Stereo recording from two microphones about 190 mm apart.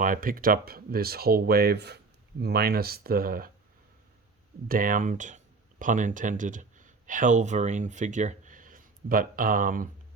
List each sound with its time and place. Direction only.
0.0 s speech: 45° right (ahead or behind)
4.7 s speech: 45° right (ahead or behind)